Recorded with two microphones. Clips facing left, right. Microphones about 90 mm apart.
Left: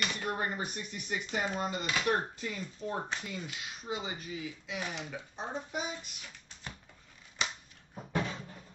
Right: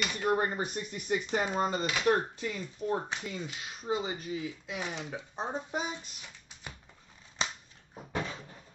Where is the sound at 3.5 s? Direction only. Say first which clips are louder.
Right 5 dB; 35° right (ahead or behind).